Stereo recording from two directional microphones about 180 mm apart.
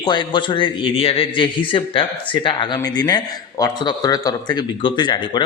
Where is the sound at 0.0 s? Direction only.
25° left (ahead or behind).